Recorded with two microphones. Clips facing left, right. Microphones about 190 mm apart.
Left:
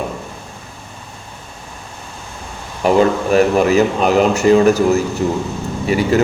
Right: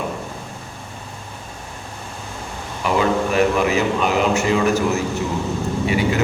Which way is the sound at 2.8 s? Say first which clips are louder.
Left 5 dB; 40° left (ahead or behind).